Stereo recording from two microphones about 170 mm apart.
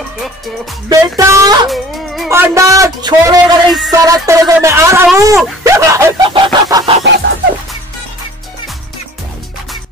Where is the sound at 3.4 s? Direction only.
Centre (ahead or behind).